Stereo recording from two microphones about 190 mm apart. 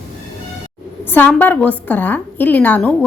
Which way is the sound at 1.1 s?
10° left (ahead or behind).